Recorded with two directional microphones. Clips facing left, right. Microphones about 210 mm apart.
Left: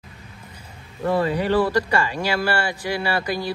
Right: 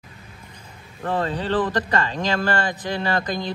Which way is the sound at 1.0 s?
10° left (ahead or behind).